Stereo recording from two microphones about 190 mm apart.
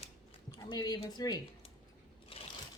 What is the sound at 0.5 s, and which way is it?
A woman's voice, 20° left (ahead or behind).